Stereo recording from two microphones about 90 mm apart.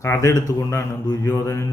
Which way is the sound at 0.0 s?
35° left (ahead or behind).